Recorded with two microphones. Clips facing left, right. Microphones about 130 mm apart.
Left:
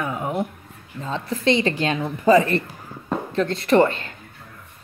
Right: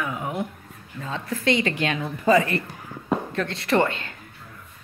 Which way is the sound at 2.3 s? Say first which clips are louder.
Left 3 dB; 35° left (ahead or behind).